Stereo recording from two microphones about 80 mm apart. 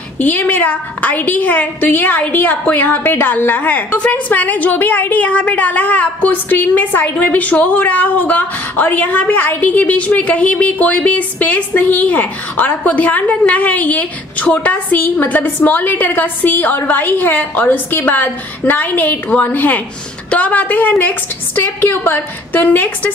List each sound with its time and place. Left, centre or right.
0.2 s a woman's voice: left